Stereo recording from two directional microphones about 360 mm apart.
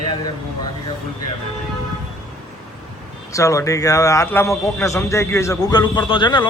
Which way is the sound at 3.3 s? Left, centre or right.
Centre.